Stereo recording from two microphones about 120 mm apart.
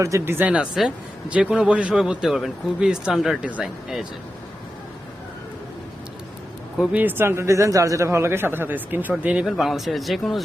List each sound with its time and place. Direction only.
0.0 s speech: 20° right (ahead or behind); by 4.0 s 5° right (ahead or behind)
6.9 s speech: 15° right (ahead or behind); by 10.4 s centre (ahead or behind)